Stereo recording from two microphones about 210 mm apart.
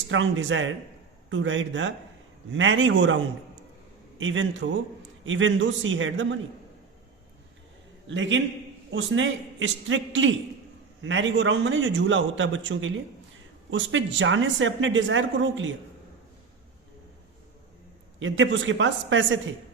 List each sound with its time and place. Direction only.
0.1 s speech: 65° right (ahead or behind)
4.2 s speech: 65° right (ahead or behind)
8.0 s a man's voice: 60° right (ahead or behind)
18.2 s speech: 65° right (ahead or behind)